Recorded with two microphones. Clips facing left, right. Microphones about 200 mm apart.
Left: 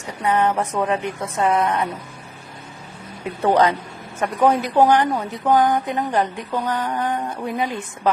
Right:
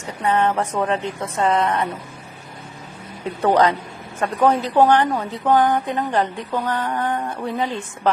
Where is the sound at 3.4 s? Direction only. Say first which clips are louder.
Even; 15° left (ahead or behind).